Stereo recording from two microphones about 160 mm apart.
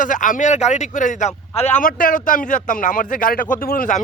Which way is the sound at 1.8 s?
60° left (ahead or behind).